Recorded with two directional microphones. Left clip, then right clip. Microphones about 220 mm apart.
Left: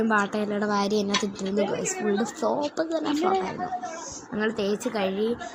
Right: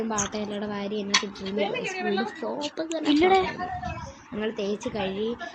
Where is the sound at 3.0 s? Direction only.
20° right (ahead or behind).